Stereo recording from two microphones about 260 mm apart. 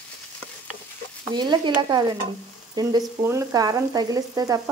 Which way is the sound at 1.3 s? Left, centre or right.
Centre.